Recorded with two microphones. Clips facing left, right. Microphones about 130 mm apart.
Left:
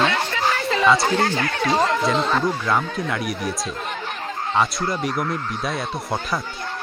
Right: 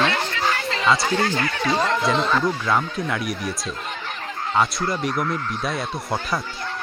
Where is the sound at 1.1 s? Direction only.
50° left (ahead or behind).